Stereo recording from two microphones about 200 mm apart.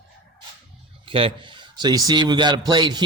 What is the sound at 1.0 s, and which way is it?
A man's voice, 25° right (ahead or behind).